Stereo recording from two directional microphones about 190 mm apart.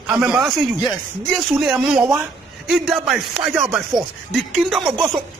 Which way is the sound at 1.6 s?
5° right (ahead or behind).